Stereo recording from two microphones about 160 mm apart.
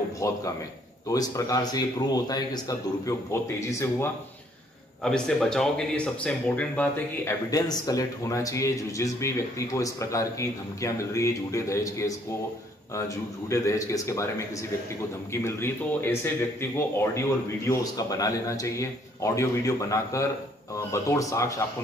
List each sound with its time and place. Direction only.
0.2 s a man's voice: 20° left (ahead or behind)
5.0 s speech: 5° left (ahead or behind)
7.5 s a man's voice: 25° left (ahead or behind)
15.3 s a man's voice: 15° left (ahead or behind)